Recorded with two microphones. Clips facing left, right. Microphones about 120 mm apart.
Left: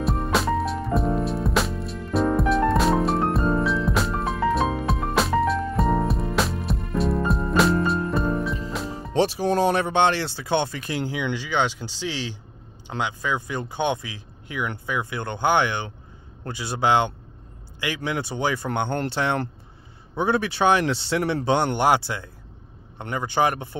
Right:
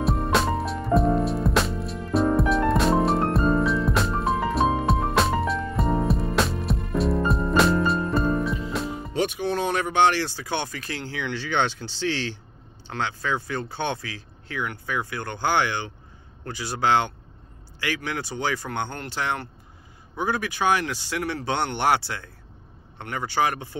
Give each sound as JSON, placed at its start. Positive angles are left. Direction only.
{"t": 0.0, "sound": "music", "side_deg": 0}
{"t": 9.1, "sound": "speech", "side_deg": 30}